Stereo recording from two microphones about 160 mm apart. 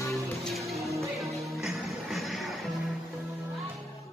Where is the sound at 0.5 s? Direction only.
Centre (ahead or behind).